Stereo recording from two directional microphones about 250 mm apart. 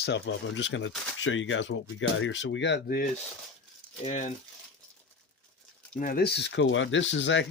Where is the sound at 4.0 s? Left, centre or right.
Left.